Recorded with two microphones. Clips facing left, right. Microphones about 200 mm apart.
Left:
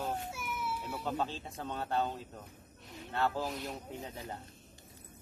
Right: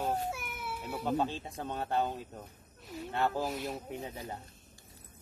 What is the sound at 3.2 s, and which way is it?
Speech, 15° right (ahead or behind).